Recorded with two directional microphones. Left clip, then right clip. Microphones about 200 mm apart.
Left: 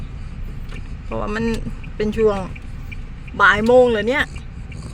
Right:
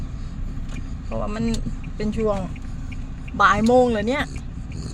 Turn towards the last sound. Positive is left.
turn(degrees=0)  # may be behind; listen again after turning